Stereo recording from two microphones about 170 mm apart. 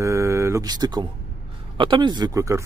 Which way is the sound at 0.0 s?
15° right (ahead or behind).